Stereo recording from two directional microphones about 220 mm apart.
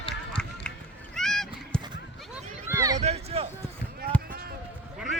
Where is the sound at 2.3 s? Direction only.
10° right (ahead or behind).